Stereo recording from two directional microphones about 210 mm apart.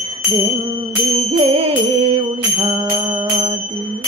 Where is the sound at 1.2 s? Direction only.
25° right (ahead or behind).